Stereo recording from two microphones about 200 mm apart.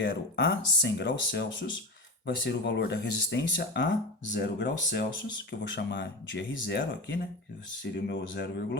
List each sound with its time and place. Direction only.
0.0 s speech: 60° left (ahead or behind)